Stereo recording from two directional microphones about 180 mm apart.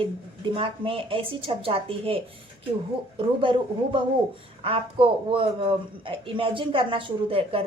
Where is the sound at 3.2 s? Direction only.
30° right (ahead or behind).